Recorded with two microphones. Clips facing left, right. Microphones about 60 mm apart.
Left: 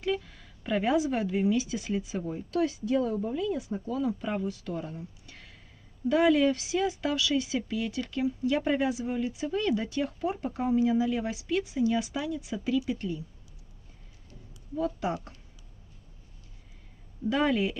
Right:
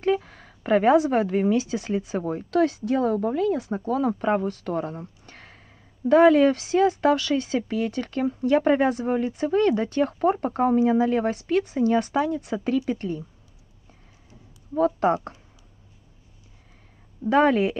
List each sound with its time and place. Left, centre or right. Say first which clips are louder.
0.0 s speech: right 7 dB; right
15.0 s speech: right 11 dB; right
17.3 s speech: right 7 dB; right